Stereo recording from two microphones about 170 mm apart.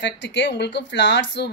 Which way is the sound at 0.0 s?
90° left.